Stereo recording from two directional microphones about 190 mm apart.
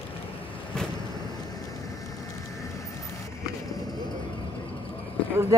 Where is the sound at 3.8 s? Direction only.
20° left (ahead or behind).